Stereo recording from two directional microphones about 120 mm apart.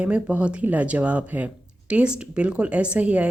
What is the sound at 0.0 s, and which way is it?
A woman's voice, 10° right (ahead or behind).